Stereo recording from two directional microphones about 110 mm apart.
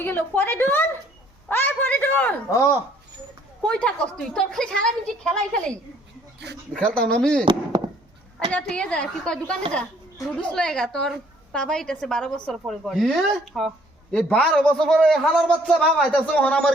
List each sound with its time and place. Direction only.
0.0 s a woman's voice: 20° left (ahead or behind)
2.5 s speech: 30° left (ahead or behind)
3.7 s a man's voice: 10° left (ahead or behind)
6.7 s a man's voice: 10° left (ahead or behind)
8.5 s a man's voice: 10° left (ahead or behind)